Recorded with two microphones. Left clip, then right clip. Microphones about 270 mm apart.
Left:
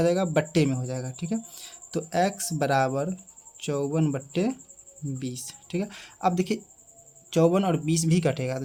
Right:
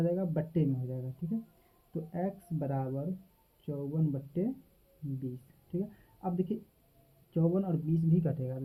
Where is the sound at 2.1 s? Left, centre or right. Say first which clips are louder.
Left 13 dB; left.